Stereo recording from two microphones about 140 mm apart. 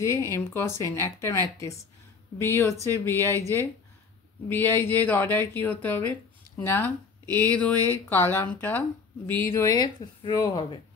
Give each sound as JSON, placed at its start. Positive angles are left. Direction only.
{"t": 0.0, "sound": "speech", "side_deg": 20}
{"t": 7.2, "sound": "speech", "side_deg": -25}
{"t": 7.5, "sound": "speech", "side_deg": 10}